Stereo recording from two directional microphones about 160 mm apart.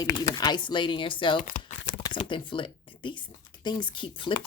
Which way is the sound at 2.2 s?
30° left (ahead or behind).